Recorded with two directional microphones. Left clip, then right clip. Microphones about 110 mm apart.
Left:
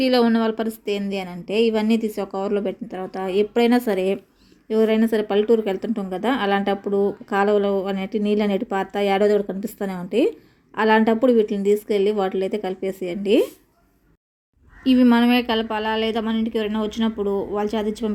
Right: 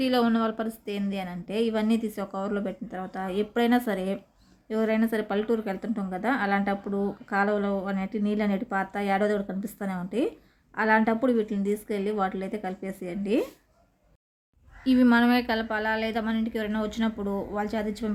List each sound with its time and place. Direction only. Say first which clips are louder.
0.0 s a woman's voice: left 6 dB; 20° left (ahead or behind)
15.0 s speech: left 3 dB; 15° left (ahead or behind)